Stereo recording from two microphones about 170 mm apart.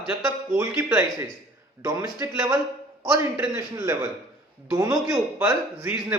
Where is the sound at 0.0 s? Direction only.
15° right (ahead or behind).